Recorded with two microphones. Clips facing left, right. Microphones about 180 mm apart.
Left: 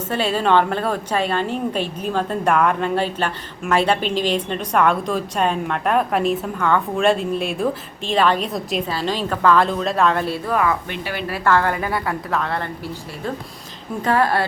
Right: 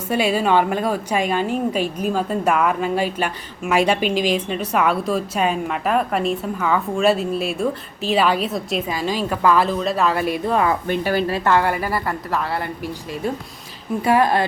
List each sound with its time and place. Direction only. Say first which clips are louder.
0.1 s a woman's voice: right 1 dB; 10° right (ahead or behind)
10.5 s speech: even; 30° right (ahead or behind)
10.8 s speech: right 7 dB; 40° right (ahead or behind)
11.3 s a woman's voice: right 1 dB; 20° right (ahead or behind); by 12.6 s 5° right (ahead or behind)
14.0 s a woman's voice: right 1 dB; 15° right (ahead or behind)